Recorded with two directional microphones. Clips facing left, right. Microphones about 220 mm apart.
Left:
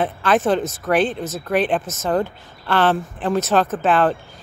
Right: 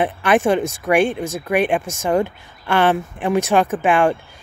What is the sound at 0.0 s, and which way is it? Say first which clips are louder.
Speech: right 2 dB; 15° right (ahead or behind).